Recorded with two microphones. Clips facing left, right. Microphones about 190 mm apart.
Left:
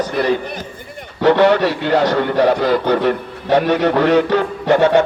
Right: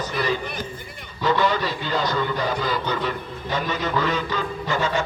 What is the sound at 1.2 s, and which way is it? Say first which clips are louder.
Speech: left 10 dB; 70° left (ahead or behind).